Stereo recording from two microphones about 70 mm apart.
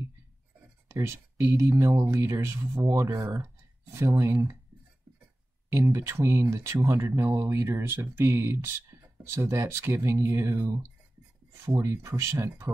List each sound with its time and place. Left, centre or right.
0.8 s speech: right
5.7 s speech: right
11.6 s speech: right